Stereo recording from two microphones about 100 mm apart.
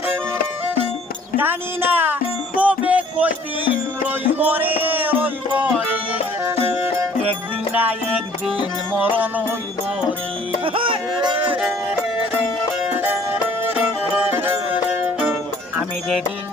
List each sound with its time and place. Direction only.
1.4 s speech: 20° right (ahead or behind)
2.6 s music: 15° right (ahead or behind)
7.7 s music: 15° right (ahead or behind)
9.0 s music: 15° right (ahead or behind)
10.6 s a sound: 60° right (ahead or behind)
11.5 s music: 15° right (ahead or behind)